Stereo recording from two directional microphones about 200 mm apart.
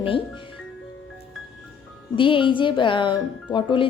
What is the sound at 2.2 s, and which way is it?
A woman's voice, 25° left (ahead or behind).